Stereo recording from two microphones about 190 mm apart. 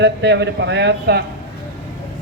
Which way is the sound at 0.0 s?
65° right (ahead or behind).